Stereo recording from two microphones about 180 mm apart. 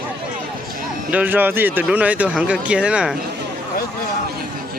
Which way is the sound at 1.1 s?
10° right (ahead or behind).